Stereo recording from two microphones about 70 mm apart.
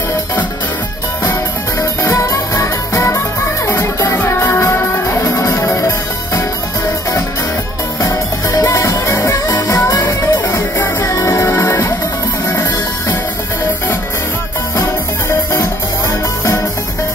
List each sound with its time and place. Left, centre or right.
1.2 s music: left
8.0 s music: left
9.5 s music: left
14.8 s music: left